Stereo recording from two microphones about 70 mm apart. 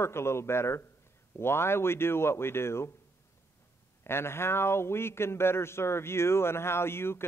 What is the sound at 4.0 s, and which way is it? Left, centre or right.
A man's voice, left.